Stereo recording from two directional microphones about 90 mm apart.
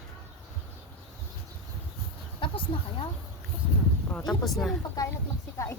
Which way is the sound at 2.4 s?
70° left (ahead or behind).